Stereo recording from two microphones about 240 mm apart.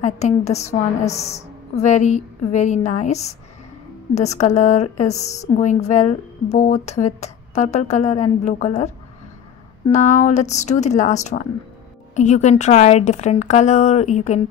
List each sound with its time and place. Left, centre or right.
0.0 s a woman's voice: left
9.8 s a woman's voice: left